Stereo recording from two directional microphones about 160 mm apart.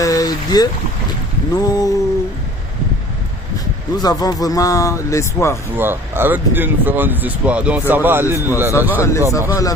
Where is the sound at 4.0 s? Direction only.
25° left (ahead or behind).